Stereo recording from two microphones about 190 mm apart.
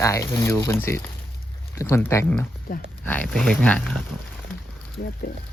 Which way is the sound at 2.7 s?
45° left (ahead or behind).